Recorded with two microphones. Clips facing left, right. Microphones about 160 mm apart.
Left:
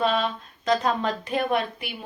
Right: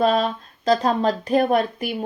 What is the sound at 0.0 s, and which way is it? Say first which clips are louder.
Speech: right 5 dB; 40° right (ahead or behind).